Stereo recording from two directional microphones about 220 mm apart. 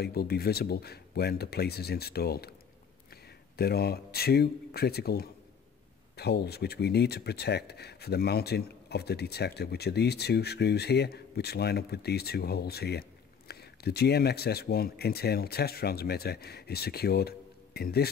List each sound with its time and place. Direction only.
0.0 s speech: 45° left (ahead or behind)